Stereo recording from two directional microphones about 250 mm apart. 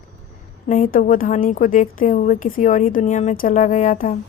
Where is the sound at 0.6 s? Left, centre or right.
Left.